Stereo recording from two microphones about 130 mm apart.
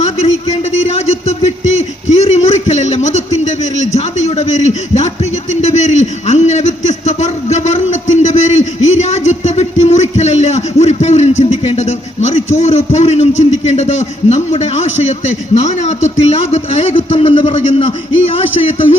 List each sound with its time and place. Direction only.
0.9 s a man's voice: 60° left (ahead or behind)